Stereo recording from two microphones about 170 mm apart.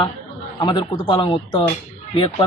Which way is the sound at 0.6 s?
30° left (ahead or behind).